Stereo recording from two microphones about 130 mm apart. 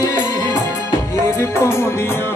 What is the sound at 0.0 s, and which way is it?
Music, 30° left (ahead or behind).